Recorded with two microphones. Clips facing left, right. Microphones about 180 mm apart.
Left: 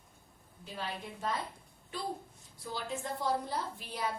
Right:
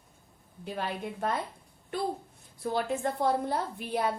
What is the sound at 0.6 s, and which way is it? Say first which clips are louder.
A woman's voice: right 7 dB; 55° right (ahead or behind).